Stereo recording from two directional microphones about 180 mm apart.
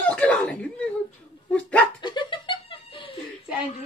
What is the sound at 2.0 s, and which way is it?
Chuckle, 25° left (ahead or behind).